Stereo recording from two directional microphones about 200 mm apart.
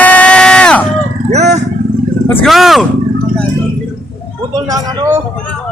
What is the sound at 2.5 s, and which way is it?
Speech, centre (ahead or behind).